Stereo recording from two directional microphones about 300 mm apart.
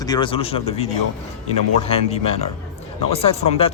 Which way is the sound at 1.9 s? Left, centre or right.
Centre.